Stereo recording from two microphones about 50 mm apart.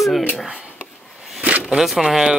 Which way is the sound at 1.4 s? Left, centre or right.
Right.